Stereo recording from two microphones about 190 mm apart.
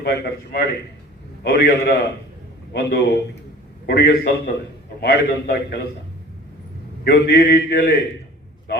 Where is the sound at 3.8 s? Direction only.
50° left (ahead or behind).